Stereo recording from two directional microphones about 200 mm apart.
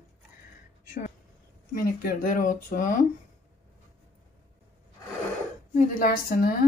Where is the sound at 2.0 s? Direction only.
45° left (ahead or behind).